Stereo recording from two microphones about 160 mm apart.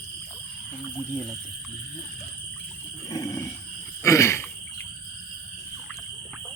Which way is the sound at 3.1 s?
20° left (ahead or behind).